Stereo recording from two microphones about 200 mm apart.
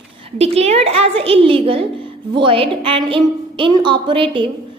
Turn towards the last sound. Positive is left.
turn(degrees=-25)  # may be behind; listen again after turning